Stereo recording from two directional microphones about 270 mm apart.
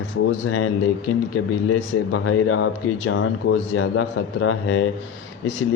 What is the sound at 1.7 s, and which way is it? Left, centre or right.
Speech, left.